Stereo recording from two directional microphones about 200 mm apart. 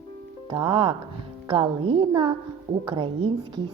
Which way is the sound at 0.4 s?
25° right (ahead or behind).